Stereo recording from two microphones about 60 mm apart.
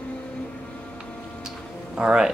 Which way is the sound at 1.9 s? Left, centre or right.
Centre.